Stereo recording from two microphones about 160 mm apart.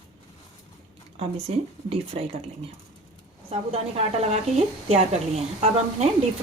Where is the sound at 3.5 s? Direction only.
40° right (ahead or behind).